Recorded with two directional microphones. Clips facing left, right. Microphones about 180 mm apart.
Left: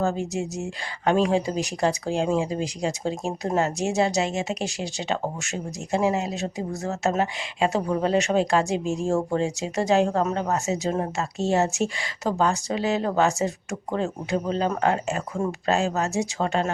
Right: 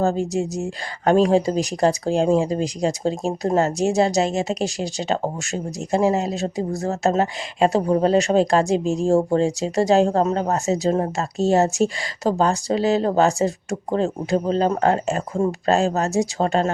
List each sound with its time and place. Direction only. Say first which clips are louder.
0.0 s speech: right 5 dB; 35° right (ahead or behind)